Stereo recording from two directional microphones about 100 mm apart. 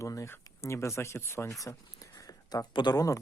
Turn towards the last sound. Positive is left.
turn(degrees=35)  # may be behind; listen again after turning